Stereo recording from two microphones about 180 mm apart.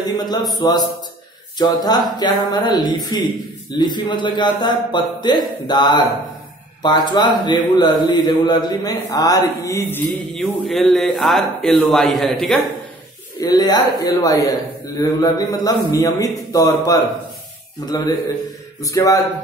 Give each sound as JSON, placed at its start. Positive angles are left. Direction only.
{"t": 0.2, "sound": "speech", "side_deg": 20}
{"t": 10.4, "sound": "speech", "side_deg": 0}
{"t": 13.4, "sound": "speech", "side_deg": 20}